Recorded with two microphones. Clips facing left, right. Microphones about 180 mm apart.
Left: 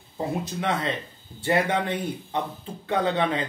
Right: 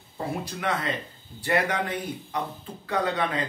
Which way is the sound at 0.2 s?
20° left (ahead or behind).